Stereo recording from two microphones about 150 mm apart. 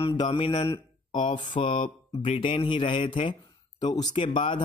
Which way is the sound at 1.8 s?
45° left (ahead or behind).